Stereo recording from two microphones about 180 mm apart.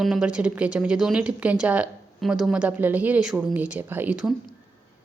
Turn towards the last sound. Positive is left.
turn(degrees=-5)  # may be behind; listen again after turning